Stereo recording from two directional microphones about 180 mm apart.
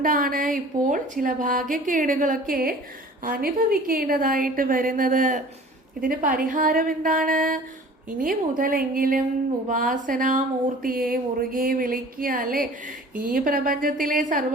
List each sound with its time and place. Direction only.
0.0 s a woman's voice: 50° right (ahead or behind)